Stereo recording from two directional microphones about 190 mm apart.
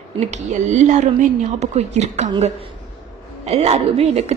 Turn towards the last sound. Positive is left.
turn(degrees=-35)  # may be behind; listen again after turning